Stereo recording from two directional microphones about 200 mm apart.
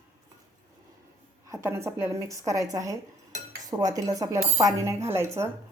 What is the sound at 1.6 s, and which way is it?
Speech, 10° right (ahead or behind).